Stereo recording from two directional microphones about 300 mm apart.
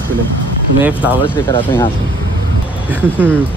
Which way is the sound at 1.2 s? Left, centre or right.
Centre.